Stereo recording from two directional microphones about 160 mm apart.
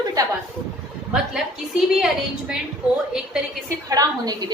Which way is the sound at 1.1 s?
5° right (ahead or behind).